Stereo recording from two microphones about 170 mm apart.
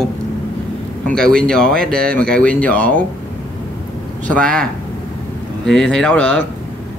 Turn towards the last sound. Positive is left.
turn(degrees=5)  # may be behind; listen again after turning